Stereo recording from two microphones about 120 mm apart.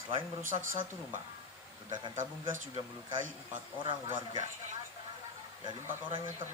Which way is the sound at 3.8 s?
45° right (ahead or behind).